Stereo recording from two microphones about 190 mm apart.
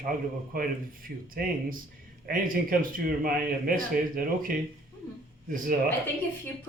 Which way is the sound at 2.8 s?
50° right (ahead or behind).